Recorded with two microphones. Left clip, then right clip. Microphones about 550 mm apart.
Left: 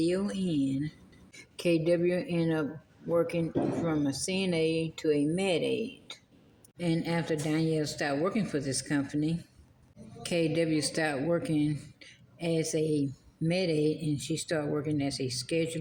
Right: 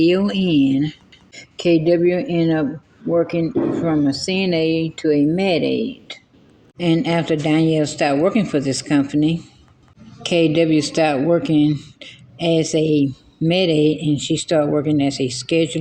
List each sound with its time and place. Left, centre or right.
0.0 s speech: left